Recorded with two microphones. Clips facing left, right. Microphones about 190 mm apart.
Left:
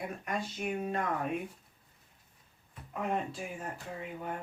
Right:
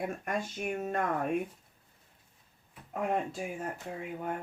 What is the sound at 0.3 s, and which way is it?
Speech, 45° right (ahead or behind).